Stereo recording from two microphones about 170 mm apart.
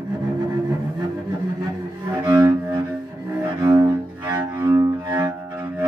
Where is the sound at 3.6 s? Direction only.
20° right (ahead or behind).